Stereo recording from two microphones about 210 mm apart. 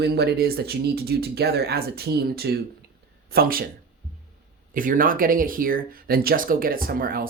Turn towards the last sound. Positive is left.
turn(degrees=-45)  # may be behind; listen again after turning